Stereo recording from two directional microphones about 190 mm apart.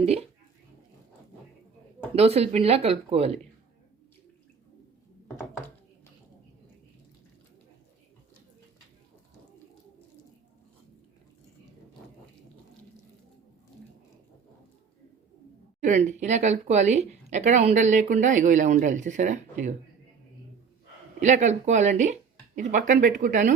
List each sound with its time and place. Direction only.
2.1 s speech: 35° right (ahead or behind)
15.8 s speech: 40° right (ahead or behind)
21.2 s speech: 40° right (ahead or behind)